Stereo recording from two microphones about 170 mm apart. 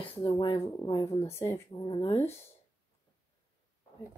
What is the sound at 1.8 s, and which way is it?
Speech, 30° left (ahead or behind).